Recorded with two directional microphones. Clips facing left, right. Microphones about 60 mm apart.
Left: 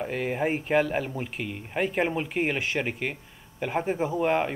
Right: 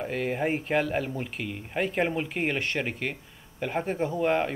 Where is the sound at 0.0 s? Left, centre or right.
Centre.